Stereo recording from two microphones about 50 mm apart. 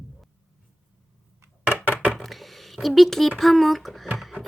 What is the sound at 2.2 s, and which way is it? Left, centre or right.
Speech, centre.